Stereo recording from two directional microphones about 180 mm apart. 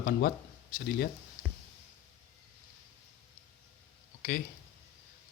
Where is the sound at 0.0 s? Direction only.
60° left (ahead or behind).